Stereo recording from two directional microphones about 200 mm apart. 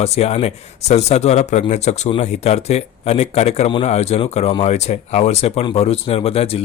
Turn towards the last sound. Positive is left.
turn(degrees=30)  # may be behind; listen again after turning